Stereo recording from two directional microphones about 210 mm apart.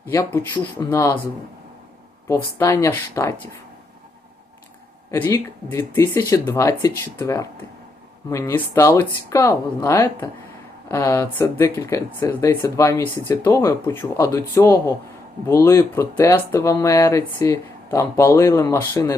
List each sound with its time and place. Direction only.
0.1 s speech: 15° left (ahead or behind)
2.2 s speech: 15° left (ahead or behind)
5.1 s speech: 15° left (ahead or behind)